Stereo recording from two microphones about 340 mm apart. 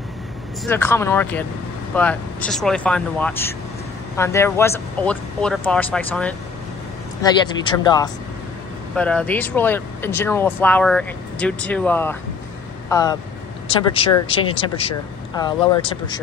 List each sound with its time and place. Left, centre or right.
0.7 s speech: centre